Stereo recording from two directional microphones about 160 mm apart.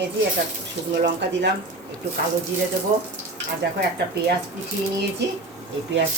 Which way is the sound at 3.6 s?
90° right.